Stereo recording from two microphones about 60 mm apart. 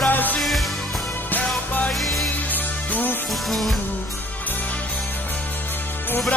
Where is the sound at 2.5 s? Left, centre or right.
Left.